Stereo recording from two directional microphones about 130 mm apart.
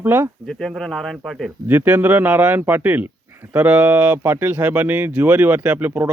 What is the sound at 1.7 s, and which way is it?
Speech, 10° right (ahead or behind).